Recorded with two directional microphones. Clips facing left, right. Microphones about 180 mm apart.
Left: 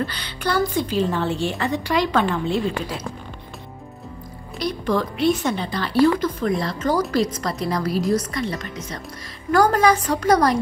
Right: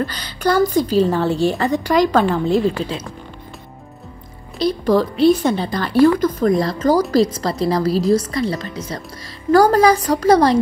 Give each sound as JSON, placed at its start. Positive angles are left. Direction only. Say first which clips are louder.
{"t": 0.0, "sound": "a woman's voice", "louder": "right 5 dB", "side_deg": -40}
{"t": 4.6, "sound": "a woman's voice", "louder": "right 6 dB", "side_deg": -30}